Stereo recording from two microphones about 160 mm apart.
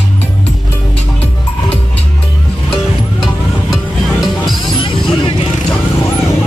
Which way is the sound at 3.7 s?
Centre (ahead or behind).